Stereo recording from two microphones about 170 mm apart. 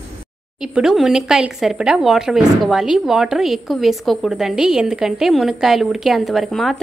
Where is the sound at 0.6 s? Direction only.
5° right (ahead or behind).